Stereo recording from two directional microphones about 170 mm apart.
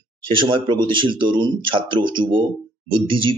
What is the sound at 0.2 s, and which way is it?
Speech, 30° right (ahead or behind).